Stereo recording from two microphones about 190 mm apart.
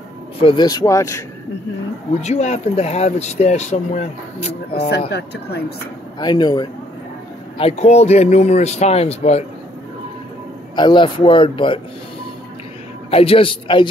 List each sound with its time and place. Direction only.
0.4 s speech: 25° left (ahead or behind)
2.2 s speech: 35° left (ahead or behind)
4.7 s speech: 60° left (ahead or behind)
6.1 s speech: 20° left (ahead or behind)
7.5 s speech: 35° left (ahead or behind)
10.8 s speech: 25° left (ahead or behind)
13.1 s speech: 30° left (ahead or behind)